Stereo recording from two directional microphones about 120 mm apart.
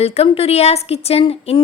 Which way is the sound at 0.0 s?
60° left (ahead or behind).